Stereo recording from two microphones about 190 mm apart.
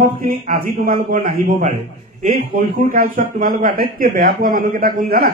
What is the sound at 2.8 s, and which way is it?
Speech, 45° right (ahead or behind).